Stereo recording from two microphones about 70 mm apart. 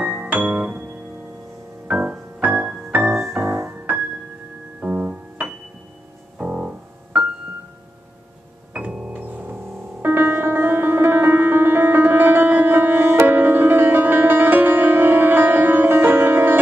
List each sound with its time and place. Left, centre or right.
0.0 s piano: right
1.9 s music: centre
3.5 s music: right
6.3 s piano: centre
8.7 s music: centre
10.0 s music: right